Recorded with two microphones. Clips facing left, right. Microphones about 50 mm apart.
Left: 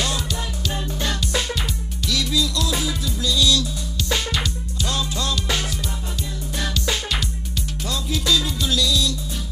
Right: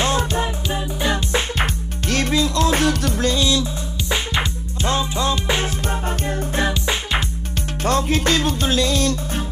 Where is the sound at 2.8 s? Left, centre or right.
Right.